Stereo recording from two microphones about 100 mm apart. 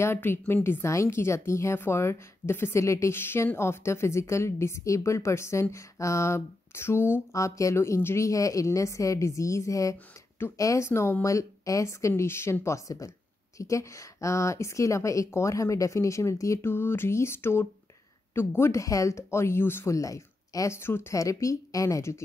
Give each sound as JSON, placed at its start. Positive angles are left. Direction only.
{"t": 0.0, "sound": "a woman's voice", "side_deg": 25}